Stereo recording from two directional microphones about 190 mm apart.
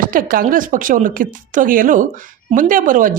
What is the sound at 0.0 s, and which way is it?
Speech, 45° right (ahead or behind).